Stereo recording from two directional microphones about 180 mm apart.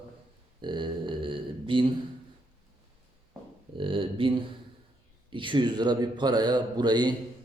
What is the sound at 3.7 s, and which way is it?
A man's voice, 30° right (ahead or behind).